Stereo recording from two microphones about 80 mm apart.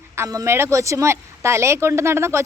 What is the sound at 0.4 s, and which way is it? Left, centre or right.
Speech, right.